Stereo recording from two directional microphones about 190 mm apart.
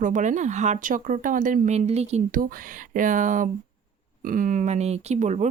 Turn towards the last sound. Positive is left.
turn(degrees=-40)  # may be behind; listen again after turning